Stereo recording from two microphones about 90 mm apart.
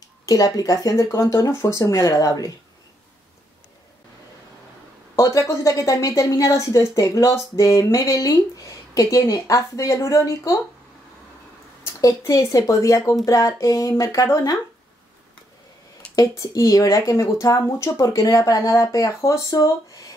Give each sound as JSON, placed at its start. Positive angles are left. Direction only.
{"t": 0.2, "sound": "a woman's voice", "side_deg": 45}
{"t": 5.1, "sound": "a woman's voice", "side_deg": 35}
{"t": 11.8, "sound": "a woman's voice", "side_deg": 35}
{"t": 16.2, "sound": "a woman's voice", "side_deg": 40}